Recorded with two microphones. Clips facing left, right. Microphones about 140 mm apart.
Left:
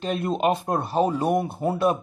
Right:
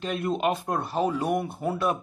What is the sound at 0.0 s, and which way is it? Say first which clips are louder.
Speech: left 3 dB; 30° left (ahead or behind).